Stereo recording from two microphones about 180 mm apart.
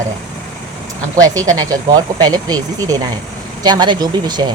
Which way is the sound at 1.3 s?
20° right (ahead or behind).